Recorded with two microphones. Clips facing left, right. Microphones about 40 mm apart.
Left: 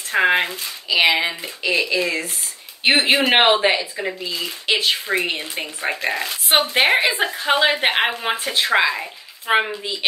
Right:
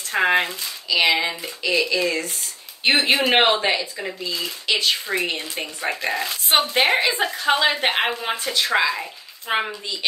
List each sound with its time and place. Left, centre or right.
0.1 s speech: centre